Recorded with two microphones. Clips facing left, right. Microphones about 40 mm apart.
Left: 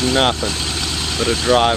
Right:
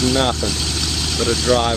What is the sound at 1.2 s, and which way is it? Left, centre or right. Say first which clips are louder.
Speech: left 2 dB; centre.